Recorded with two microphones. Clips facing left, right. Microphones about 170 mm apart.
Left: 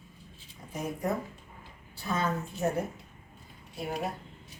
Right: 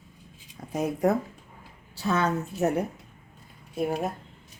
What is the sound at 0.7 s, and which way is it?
A woman's voice, 75° right (ahead or behind).